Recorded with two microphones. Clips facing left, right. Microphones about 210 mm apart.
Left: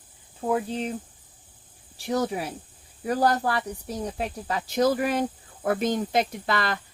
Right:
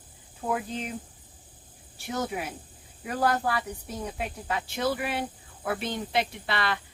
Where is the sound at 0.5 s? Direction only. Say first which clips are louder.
Left 5 dB; 35° left (ahead or behind).